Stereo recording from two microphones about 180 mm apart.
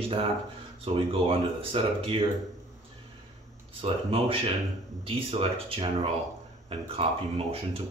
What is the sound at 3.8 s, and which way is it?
Speech, 30° right (ahead or behind).